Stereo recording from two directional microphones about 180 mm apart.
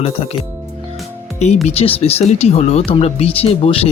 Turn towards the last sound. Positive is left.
turn(degrees=35)  # may be behind; listen again after turning